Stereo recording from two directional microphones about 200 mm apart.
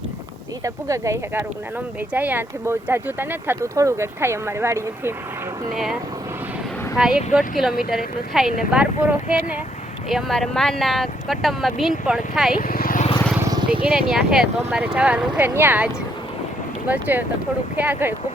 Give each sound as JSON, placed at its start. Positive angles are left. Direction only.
{"t": 0.6, "sound": "speech", "side_deg": -15}
{"t": 5.7, "sound": "speech", "side_deg": 0}
{"t": 12.5, "sound": "vehicle", "side_deg": 45}
{"t": 13.9, "sound": "speech", "side_deg": 0}
{"t": 16.9, "sound": "speech", "side_deg": -10}